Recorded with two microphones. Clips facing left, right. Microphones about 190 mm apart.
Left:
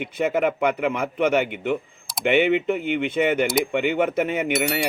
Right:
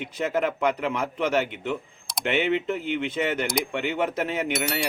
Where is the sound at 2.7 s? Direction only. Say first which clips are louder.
Left 4 dB; 60° left (ahead or behind).